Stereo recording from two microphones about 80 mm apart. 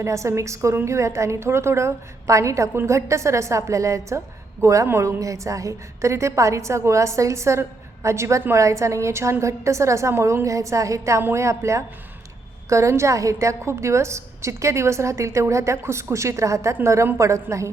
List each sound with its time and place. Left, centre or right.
0.0 s a woman's voice: right